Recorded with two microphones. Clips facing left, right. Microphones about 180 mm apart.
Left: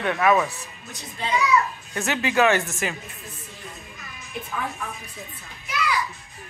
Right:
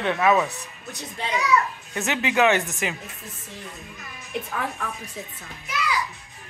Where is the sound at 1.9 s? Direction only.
20° right (ahead or behind).